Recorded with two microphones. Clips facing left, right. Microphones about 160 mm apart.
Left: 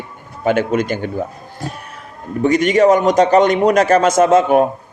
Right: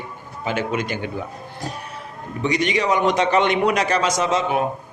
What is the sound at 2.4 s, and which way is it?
A man's voice, 45° left (ahead or behind).